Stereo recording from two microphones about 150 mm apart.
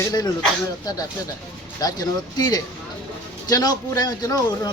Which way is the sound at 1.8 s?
25° left (ahead or behind).